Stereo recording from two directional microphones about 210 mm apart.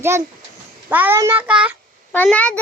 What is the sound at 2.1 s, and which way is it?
Speech, 10° left (ahead or behind).